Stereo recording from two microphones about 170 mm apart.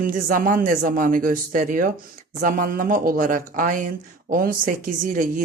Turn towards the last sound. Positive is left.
turn(degrees=-50)  # may be behind; listen again after turning